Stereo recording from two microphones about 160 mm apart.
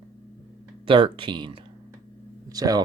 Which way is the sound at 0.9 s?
30° right (ahead or behind).